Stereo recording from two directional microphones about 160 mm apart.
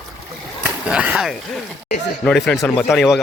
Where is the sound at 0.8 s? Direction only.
5° right (ahead or behind).